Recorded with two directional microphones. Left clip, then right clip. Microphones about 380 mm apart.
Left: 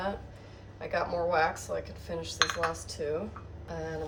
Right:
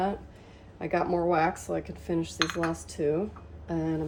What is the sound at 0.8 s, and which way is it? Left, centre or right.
Cutlery, centre.